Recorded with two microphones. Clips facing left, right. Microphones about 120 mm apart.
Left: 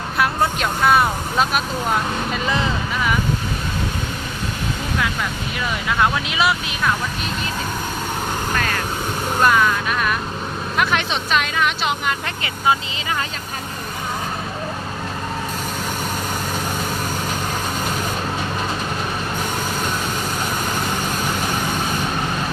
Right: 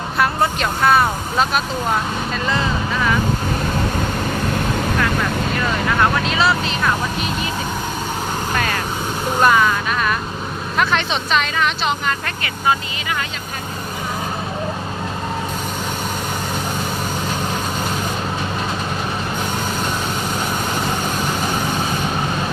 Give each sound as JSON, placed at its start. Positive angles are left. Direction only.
{"t": 0.2, "sound": "vehicle", "side_deg": 5}
{"t": 2.3, "sound": "speech", "side_deg": 15}
{"t": 6.3, "sound": "speech", "side_deg": 15}
{"t": 9.4, "sound": "speech", "side_deg": -5}